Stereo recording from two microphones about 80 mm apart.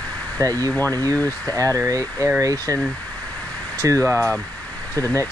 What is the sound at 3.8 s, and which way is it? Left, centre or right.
Speech, right.